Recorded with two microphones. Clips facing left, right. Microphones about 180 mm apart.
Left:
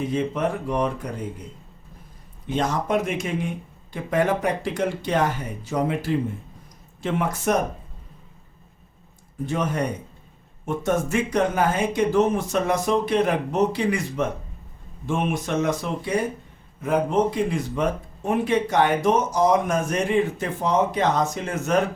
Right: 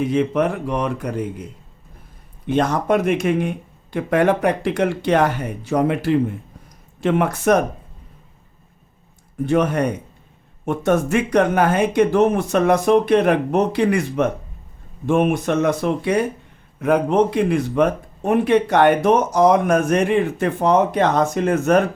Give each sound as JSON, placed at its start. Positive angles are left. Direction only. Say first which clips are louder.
{"t": 0.1, "sound": "speech", "louder": "right 5 dB", "side_deg": -75}
{"t": 2.5, "sound": "speech", "louder": "right 5 dB", "side_deg": -60}
{"t": 9.5, "sound": "speech", "louder": "right 8 dB", "side_deg": -65}
{"t": 10.8, "sound": "speech", "louder": "right 5 dB", "side_deg": -65}